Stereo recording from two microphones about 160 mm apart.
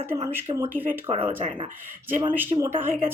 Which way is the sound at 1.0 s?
40° right (ahead or behind).